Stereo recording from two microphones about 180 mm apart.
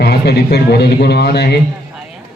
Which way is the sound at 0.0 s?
65° left (ahead or behind).